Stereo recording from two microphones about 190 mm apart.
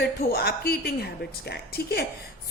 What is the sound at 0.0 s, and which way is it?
A woman's voice, 55° left (ahead or behind).